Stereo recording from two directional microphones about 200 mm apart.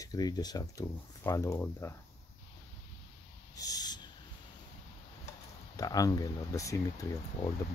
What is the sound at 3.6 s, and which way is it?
Owl, 20° left (ahead or behind).